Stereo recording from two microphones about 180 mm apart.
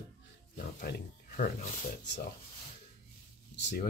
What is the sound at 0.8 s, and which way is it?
Speech, 60° left (ahead or behind).